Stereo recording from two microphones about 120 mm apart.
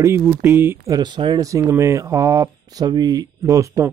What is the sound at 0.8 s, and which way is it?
Speech, 35° right (ahead or behind).